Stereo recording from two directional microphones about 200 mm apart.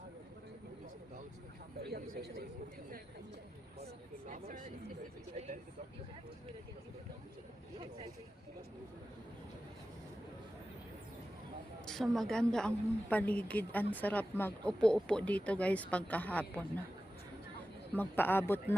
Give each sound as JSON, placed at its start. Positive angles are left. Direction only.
{"t": 1.8, "sound": "a sound", "side_deg": -50}
{"t": 4.3, "sound": "speech", "side_deg": -40}
{"t": 11.9, "sound": "a woman's voice", "side_deg": 0}
{"t": 17.9, "sound": "speech", "side_deg": 10}